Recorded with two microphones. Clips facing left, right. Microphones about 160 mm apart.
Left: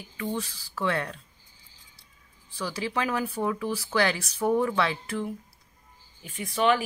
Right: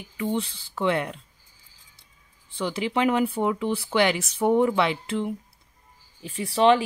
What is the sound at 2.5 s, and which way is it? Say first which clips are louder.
Speech: right 4 dB; 25° right (ahead or behind).